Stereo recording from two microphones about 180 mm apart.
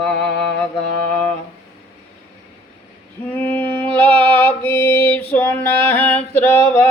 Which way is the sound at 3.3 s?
10° left (ahead or behind).